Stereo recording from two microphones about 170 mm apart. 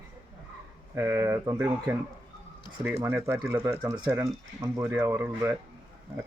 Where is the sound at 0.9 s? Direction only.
15° right (ahead or behind).